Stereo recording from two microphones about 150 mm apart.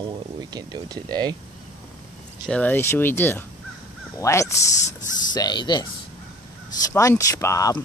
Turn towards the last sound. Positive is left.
turn(degrees=20)  # may be behind; listen again after turning